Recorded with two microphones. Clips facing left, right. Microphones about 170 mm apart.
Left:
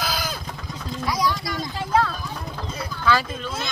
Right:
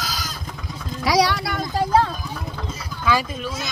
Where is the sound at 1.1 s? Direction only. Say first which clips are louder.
Right 6 dB; 80° right; by 1.7 s 60° right (ahead or behind).